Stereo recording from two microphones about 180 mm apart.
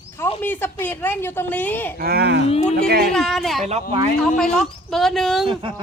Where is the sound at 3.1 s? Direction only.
Centre (ahead or behind).